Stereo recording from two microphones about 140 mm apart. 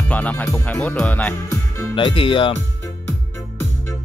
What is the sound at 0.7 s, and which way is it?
Speech, 10° left (ahead or behind).